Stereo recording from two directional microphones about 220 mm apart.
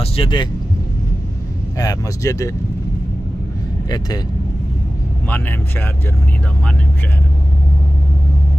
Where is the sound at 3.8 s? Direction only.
20° left (ahead or behind).